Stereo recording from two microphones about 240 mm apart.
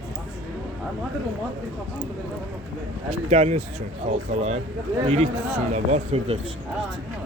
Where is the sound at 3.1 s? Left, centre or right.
Right.